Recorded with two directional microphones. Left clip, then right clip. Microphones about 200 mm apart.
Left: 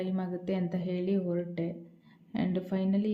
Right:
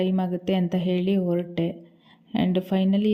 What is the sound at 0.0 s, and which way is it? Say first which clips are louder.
Speech: right 9 dB; 35° right (ahead or behind).